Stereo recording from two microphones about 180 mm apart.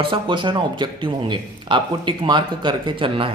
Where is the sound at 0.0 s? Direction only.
25° right (ahead or behind).